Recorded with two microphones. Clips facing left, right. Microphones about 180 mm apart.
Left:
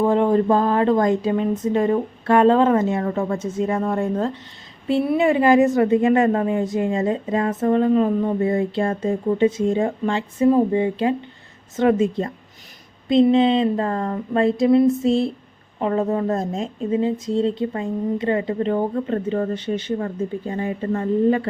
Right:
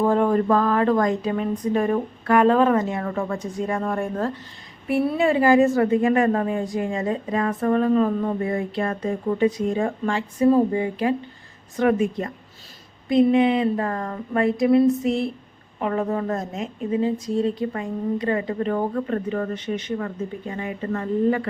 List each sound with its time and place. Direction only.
0.0 s a woman's voice: 20° left (ahead or behind)